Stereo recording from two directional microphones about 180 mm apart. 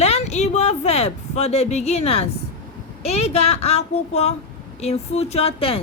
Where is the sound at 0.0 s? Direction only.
35° left (ahead or behind).